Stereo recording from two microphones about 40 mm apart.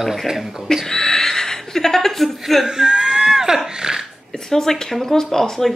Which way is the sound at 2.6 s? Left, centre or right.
Centre.